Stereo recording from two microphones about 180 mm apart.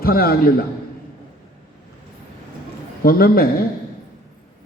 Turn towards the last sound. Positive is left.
turn(degrees=55)  # may be behind; listen again after turning